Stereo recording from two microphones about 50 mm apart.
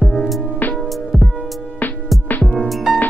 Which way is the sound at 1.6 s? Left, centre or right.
Left.